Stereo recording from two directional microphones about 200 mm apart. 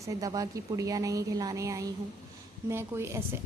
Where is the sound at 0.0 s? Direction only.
15° right (ahead or behind).